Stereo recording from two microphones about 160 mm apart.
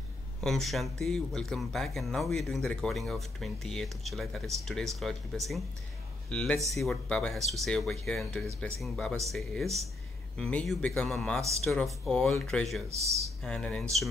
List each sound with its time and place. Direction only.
0.4 s a man's voice: centre (ahead or behind)